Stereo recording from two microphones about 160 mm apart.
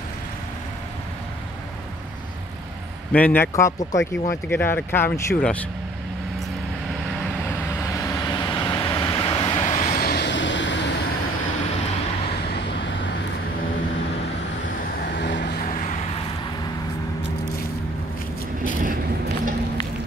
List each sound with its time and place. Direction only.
3.1 s speech: 10° left (ahead or behind)
8.0 s vehicle: 20° left (ahead or behind)
9.7 s vehicle: 55° left (ahead or behind); by 10.9 s 90° left
15.1 s vehicle: 90° left